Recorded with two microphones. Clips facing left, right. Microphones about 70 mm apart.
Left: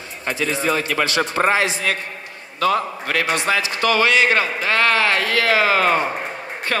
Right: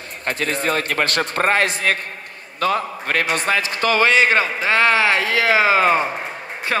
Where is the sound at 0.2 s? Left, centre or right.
Right.